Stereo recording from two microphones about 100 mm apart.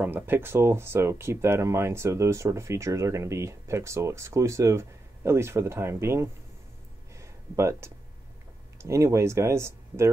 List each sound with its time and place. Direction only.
0.0 s speech: 20° right (ahead or behind)
7.2 s a sound: 30° right (ahead or behind)
8.7 s speech: 30° right (ahead or behind)